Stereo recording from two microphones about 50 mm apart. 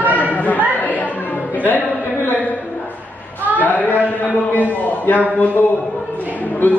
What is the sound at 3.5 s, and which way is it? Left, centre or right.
A man's voice, left.